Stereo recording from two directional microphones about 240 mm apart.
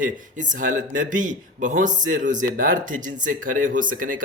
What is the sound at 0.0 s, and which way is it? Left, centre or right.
Speech, right.